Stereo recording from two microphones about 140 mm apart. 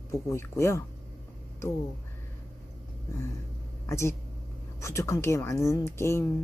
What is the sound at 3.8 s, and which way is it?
Speech, 20° left (ahead or behind).